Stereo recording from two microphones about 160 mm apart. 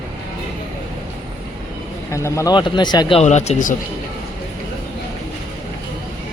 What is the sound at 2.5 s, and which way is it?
Speech, 30° left (ahead or behind).